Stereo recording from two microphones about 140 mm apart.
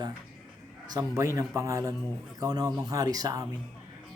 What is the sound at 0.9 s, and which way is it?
Speech, 25° right (ahead or behind).